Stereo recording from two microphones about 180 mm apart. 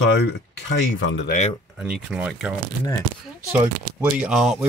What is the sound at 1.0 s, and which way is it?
Speech, 90° left.